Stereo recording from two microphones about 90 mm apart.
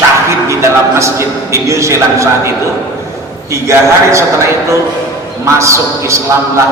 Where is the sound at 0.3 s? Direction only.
35° right (ahead or behind).